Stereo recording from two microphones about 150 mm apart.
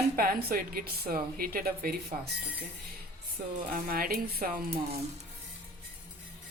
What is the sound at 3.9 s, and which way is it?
Speech, 80° right.